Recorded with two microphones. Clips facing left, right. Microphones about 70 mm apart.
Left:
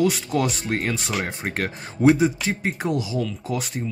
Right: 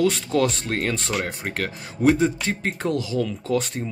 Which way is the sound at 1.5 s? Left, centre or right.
Left.